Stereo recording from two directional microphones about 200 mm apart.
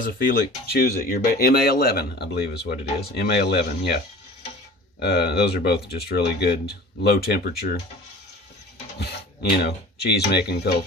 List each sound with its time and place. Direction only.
0.0 s speech: 45° left (ahead or behind)
9.0 s speech: 55° left (ahead or behind)